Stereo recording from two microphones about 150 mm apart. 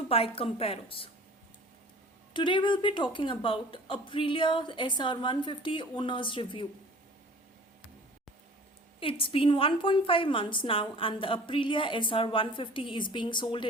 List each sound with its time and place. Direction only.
0.1 s a woman's voice: 40° left (ahead or behind)
2.3 s a woman's voice: 30° left (ahead or behind)
9.0 s a woman's voice: 35° left (ahead or behind)